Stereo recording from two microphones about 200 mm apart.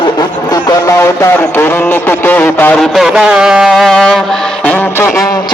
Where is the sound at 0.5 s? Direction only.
15° left (ahead or behind).